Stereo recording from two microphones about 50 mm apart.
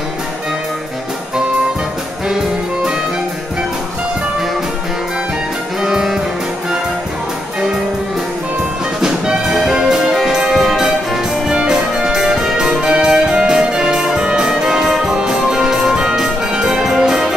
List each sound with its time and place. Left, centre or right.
5.8 s music: centre
9.0 s music: centre